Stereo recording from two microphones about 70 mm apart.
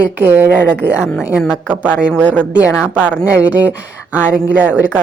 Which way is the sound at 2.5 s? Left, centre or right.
Centre.